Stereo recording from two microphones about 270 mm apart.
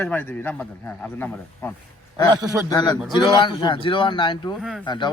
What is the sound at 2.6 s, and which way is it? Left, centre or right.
A man's voice, centre.